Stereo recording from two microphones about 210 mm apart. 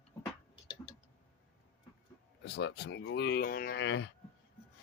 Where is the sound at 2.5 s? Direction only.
55° left (ahead or behind).